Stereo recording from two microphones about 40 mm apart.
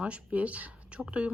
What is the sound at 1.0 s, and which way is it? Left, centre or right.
Speech, right.